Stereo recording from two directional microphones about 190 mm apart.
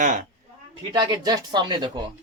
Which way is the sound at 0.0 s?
45° right (ahead or behind).